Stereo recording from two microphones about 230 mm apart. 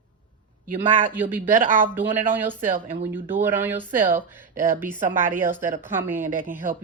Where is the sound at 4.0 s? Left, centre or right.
Right.